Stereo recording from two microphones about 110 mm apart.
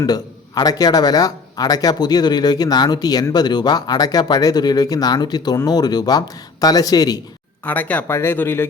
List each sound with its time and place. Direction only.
0.0 s a man's voice: 35° left (ahead or behind)
7.6 s speech: 15° left (ahead or behind)